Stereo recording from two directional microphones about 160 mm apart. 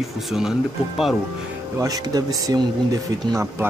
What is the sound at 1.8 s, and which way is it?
Speech, 25° right (ahead or behind).